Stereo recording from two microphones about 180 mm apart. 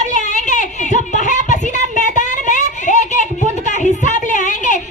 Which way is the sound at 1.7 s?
45° right (ahead or behind).